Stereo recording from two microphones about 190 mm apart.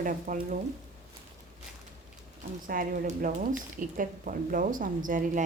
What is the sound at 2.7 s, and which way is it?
Speech, 45° right (ahead or behind).